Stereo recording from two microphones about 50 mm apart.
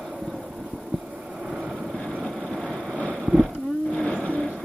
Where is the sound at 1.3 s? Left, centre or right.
Centre.